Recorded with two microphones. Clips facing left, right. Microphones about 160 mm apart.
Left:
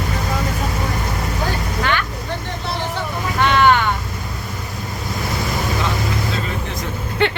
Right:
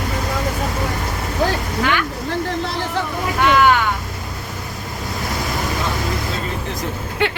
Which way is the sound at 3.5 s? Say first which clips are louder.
Even; 5° right (ahead or behind).